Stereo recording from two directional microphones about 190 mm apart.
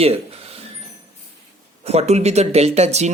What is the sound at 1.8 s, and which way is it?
Speech, 35° right (ahead or behind).